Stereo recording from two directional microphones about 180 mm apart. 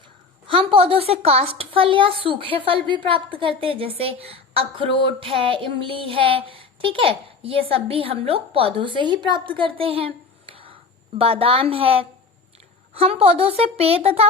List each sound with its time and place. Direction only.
0.4 s a woman's voice: 30° right (ahead or behind)
10.5 s a sound: 30° right (ahead or behind)
11.2 s a woman's voice: 30° right (ahead or behind)